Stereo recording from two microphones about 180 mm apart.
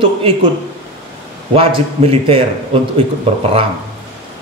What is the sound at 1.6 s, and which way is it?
Speech, 30° right (ahead or behind).